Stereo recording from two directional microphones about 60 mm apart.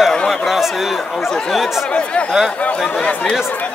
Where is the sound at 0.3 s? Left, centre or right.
Centre.